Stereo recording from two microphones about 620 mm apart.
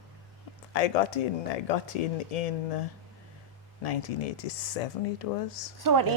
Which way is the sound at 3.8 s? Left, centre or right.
Left.